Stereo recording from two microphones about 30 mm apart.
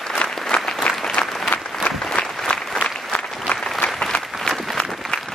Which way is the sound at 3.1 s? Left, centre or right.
Left.